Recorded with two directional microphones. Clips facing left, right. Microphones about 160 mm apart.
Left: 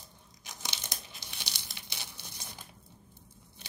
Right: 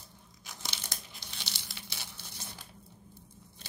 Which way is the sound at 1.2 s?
15° left (ahead or behind).